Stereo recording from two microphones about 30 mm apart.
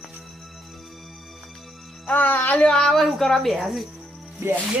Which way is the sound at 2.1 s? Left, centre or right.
Left.